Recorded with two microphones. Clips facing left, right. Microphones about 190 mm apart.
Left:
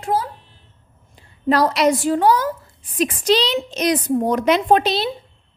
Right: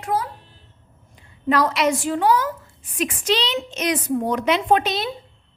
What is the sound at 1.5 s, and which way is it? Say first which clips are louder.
A woman's voice: left 3 dB; 35° left (ahead or behind).